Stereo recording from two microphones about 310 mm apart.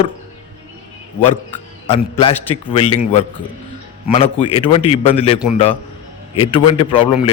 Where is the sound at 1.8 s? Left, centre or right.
Centre.